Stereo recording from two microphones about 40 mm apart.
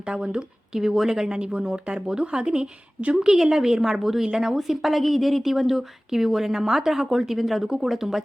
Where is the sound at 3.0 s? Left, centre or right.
Right.